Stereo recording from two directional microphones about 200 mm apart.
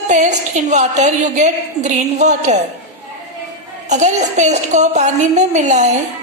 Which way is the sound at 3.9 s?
35° right (ahead or behind).